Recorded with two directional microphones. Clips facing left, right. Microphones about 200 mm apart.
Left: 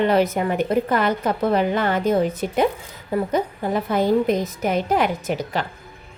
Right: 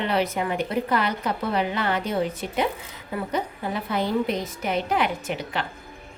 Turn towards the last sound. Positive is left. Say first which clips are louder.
# left 5 dB
turn(degrees=40)  # may be behind; listen again after turning